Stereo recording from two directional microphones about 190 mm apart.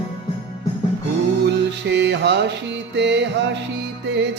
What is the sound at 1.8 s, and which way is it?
Music, 65° right (ahead or behind).